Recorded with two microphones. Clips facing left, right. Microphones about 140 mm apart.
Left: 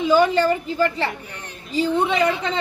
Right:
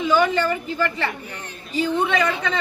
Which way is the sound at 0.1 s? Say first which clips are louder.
Left 3 dB; 30° left (ahead or behind).